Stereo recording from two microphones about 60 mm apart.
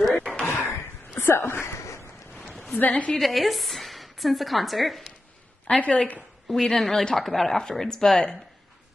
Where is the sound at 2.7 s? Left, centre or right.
Left.